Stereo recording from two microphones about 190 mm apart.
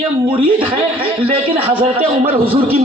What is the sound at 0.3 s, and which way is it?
Speech, 30° right (ahead or behind).